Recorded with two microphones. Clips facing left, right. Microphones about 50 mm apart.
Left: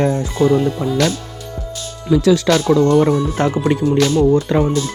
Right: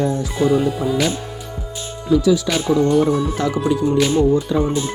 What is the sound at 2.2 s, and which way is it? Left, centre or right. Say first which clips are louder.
Speech: left 4 dB; left.